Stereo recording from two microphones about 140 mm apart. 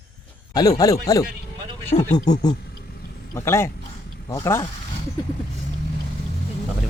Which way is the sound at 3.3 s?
20° left (ahead or behind).